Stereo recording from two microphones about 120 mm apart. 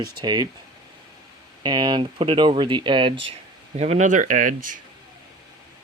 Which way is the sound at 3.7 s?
65° right (ahead or behind).